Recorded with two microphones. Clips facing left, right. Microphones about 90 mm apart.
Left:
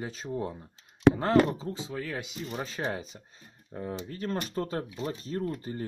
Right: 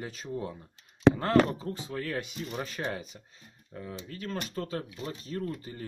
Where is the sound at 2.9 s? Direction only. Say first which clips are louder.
Left 2 dB; 30° left (ahead or behind).